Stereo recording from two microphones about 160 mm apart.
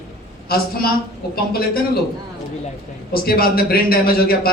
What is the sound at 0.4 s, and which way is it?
Speech, 70° left (ahead or behind).